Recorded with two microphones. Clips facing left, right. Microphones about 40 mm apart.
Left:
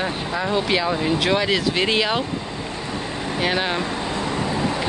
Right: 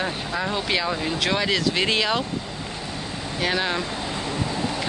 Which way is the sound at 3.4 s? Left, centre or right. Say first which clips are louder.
Left 2 dB; centre.